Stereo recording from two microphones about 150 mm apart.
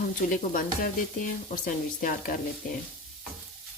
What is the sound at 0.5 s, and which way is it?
Speech, 65° left (ahead or behind).